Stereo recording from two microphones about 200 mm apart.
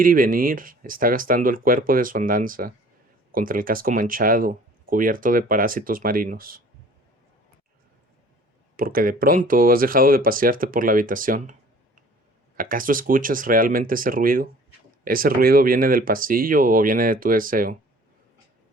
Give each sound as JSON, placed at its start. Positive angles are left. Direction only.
{"t": 0.0, "sound": "speech", "side_deg": -45}
{"t": 8.7, "sound": "speech", "side_deg": -45}
{"t": 12.5, "sound": "speech", "side_deg": -45}